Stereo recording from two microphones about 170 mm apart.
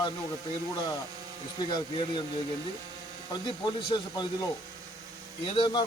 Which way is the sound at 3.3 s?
25° left (ahead or behind).